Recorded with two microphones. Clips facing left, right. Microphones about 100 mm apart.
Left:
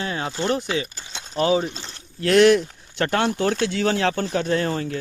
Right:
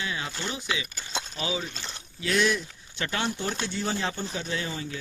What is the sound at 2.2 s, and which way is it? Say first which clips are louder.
Speech: left 11 dB; 65° left (ahead or behind).